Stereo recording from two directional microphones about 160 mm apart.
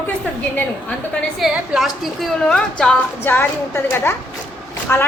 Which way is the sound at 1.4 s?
Centre (ahead or behind).